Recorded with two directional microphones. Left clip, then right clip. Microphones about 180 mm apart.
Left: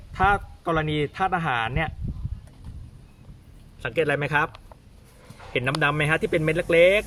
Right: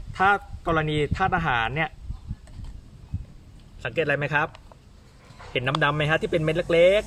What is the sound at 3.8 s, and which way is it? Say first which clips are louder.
Speech: left 1 dB; 25° left (ahead or behind).